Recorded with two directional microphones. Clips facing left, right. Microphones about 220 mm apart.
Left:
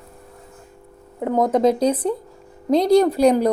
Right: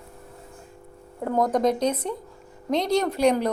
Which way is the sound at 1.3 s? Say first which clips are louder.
Left 5 dB; 25° left (ahead or behind).